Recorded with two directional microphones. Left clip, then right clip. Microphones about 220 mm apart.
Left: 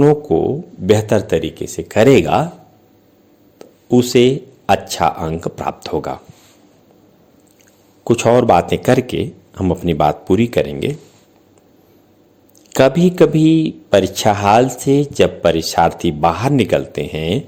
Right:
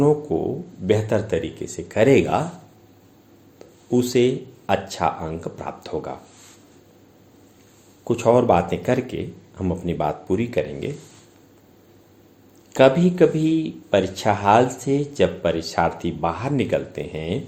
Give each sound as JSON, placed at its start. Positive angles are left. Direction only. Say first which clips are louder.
{"t": 0.0, "sound": "a man's voice", "louder": "left 7 dB", "side_deg": 40}
{"t": 3.6, "sound": "speech", "louder": "left 7 dB", "side_deg": 40}
{"t": 8.0, "sound": "a man's voice", "louder": "left 5 dB", "side_deg": 45}
{"t": 12.7, "sound": "a man's voice", "louder": "left 3 dB", "side_deg": 45}